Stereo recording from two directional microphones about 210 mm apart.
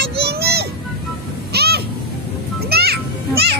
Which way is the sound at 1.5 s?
50° right (ahead or behind).